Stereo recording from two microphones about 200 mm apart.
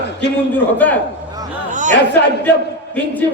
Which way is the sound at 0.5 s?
10° left (ahead or behind).